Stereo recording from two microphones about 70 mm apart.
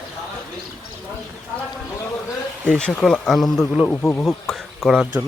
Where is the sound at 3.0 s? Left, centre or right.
Centre.